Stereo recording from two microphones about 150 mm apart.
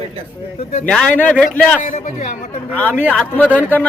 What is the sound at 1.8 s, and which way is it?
Speech, 55° left (ahead or behind).